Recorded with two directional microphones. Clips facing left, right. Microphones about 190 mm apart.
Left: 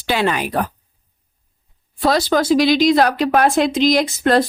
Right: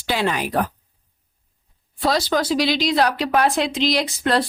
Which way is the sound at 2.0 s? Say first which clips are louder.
Left 4 dB; 50° left (ahead or behind).